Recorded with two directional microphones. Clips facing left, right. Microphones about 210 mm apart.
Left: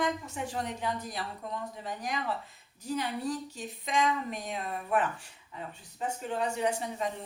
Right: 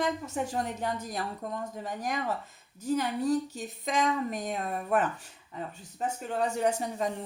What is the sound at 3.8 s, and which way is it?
Speech, 45° right (ahead or behind).